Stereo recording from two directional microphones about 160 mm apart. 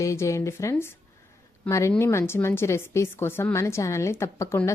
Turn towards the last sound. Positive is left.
turn(degrees=15)  # may be behind; listen again after turning